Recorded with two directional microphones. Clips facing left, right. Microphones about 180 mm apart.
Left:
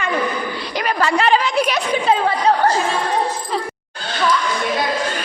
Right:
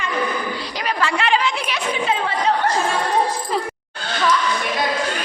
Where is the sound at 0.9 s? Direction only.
40° left (ahead or behind).